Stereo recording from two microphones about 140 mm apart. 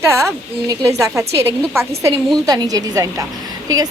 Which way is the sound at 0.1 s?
20° right (ahead or behind).